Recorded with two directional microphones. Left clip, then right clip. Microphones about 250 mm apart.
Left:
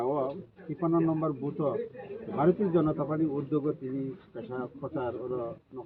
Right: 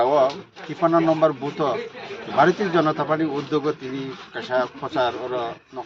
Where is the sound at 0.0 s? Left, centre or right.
Right.